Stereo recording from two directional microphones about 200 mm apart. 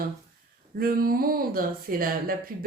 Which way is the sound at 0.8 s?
45° right (ahead or behind).